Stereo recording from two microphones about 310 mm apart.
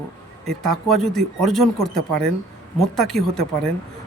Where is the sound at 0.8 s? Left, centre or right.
Centre.